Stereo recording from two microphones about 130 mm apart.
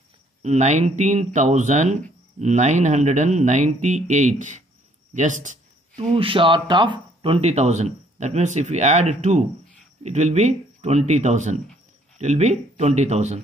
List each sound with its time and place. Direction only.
0.4 s speech: 60° right (ahead or behind)
6.1 s speech: 45° right (ahead or behind); by 13.4 s 60° right (ahead or behind)